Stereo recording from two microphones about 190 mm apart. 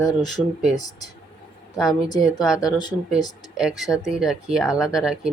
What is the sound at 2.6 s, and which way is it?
Speech, 20° left (ahead or behind).